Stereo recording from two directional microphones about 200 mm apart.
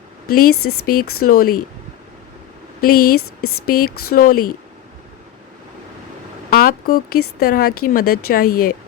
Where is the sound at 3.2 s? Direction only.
90° left.